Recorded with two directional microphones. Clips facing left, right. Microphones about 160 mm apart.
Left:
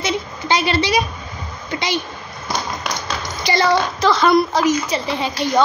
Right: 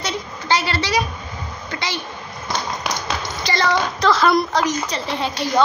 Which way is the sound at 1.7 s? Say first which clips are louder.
Left 5 dB; 15° left (ahead or behind).